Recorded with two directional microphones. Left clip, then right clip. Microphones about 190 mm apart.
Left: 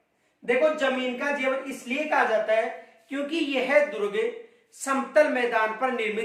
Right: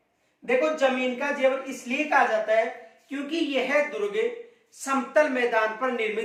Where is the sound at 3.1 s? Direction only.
15° left (ahead or behind).